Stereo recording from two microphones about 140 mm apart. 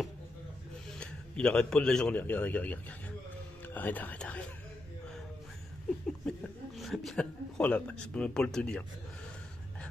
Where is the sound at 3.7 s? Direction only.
15° left (ahead or behind).